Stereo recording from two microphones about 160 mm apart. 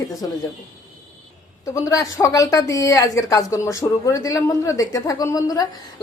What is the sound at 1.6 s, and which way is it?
Speech, 20° left (ahead or behind).